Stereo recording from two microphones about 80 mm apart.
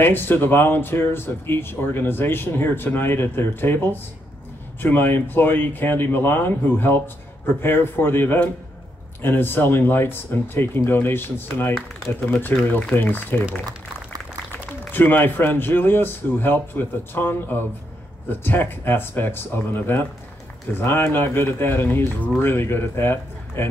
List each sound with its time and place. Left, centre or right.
0.0 s speech: left